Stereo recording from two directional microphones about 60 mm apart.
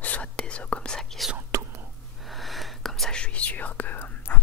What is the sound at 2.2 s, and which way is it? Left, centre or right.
Whispering, centre.